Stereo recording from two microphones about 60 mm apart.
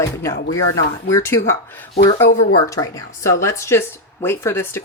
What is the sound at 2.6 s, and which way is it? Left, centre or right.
Speech, left.